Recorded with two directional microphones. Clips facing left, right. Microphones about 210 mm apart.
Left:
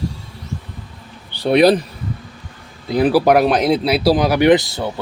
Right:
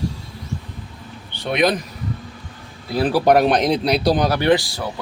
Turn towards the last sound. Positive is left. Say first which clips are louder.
# left 5 dB
turn(degrees=25)  # may be behind; listen again after turning